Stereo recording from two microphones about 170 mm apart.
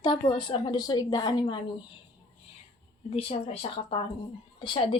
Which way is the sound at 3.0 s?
35° left (ahead or behind).